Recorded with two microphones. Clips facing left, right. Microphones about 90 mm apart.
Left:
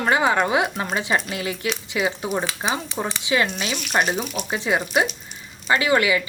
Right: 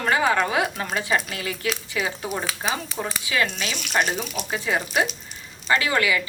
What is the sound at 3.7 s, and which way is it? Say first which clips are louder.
Speech: left 2 dB; 5° left (ahead or behind).